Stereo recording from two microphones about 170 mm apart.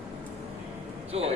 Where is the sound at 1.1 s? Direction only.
35° right (ahead or behind).